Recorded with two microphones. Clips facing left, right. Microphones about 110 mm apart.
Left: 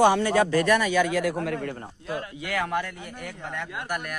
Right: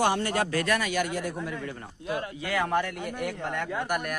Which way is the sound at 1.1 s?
85° left.